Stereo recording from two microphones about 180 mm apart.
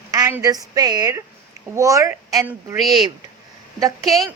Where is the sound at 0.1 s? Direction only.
15° right (ahead or behind).